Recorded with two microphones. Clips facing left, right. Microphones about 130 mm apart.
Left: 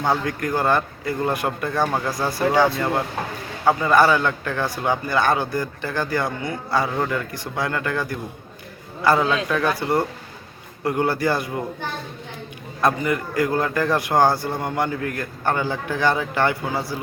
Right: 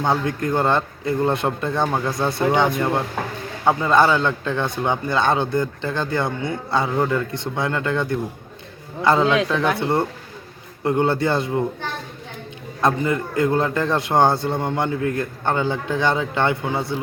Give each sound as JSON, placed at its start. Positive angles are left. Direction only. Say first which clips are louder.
{"t": 0.1, "sound": "a man's voice", "louder": "right 1 dB", "side_deg": -25}
{"t": 12.8, "sound": "a man's voice", "louder": "right 1 dB", "side_deg": -25}